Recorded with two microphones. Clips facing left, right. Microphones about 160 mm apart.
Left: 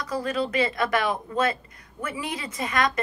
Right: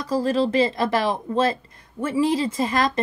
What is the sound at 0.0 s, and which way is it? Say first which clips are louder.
Speech: right 6 dB; 30° right (ahead or behind).